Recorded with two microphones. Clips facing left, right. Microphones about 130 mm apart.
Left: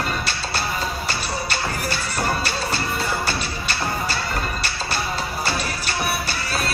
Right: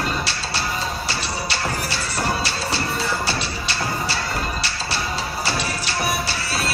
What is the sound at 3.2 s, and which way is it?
Music, 45° left (ahead or behind).